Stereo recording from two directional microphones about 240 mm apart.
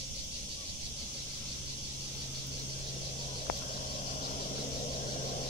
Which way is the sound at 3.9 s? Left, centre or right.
Left.